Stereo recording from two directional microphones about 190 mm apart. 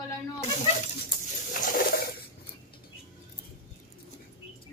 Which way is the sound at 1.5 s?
50° left (ahead or behind).